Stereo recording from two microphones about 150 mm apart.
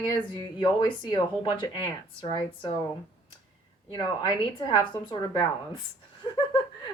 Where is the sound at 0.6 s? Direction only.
30° left (ahead or behind).